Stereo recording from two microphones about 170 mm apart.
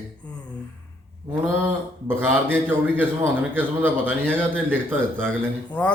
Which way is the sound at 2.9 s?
10° right (ahead or behind).